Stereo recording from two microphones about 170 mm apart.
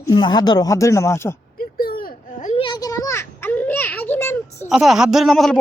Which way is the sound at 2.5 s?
30° left (ahead or behind).